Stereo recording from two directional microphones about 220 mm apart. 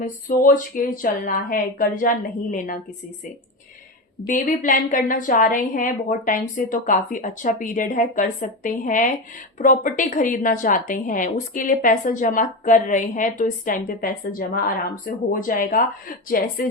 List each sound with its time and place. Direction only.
0.0 s a woman's voice: 40° left (ahead or behind)
4.3 s a woman's voice: 40° left (ahead or behind)